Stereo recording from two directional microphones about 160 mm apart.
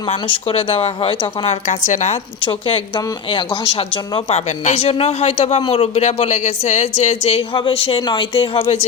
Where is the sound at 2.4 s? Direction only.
35° left (ahead or behind).